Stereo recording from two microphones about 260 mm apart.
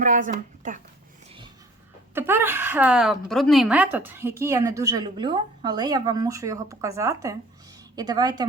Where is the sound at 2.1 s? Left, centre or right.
Centre.